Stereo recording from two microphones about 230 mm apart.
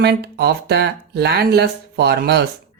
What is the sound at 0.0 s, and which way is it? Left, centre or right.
Speech, right.